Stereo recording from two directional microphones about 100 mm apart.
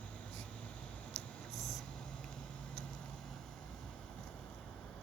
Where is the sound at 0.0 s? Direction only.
10° left (ahead or behind).